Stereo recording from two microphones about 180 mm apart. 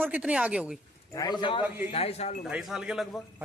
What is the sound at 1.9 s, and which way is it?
Speech, 35° left (ahead or behind).